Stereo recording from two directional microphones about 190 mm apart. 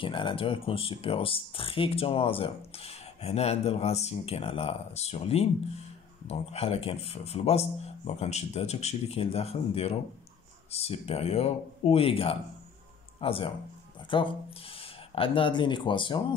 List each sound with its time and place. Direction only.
0.0 s speech: 25° left (ahead or behind)